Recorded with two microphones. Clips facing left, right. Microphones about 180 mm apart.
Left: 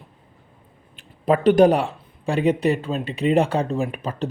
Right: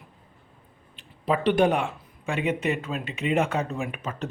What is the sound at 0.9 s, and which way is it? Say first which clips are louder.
Speech: left 6 dB; 50° left (ahead or behind).